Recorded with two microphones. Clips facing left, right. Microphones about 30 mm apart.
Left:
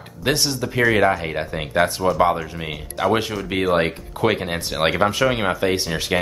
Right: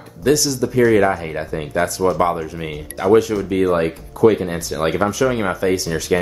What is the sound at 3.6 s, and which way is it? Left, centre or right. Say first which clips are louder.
Speech: left 1 dB; left.